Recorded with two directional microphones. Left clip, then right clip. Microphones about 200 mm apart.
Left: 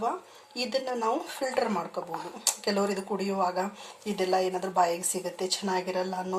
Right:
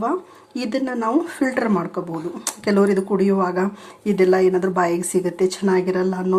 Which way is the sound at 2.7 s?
10° right (ahead or behind).